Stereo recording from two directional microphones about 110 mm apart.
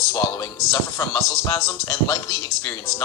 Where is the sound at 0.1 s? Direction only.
25° left (ahead or behind).